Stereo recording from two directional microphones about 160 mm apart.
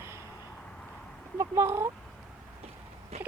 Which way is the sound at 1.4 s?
15° right (ahead or behind).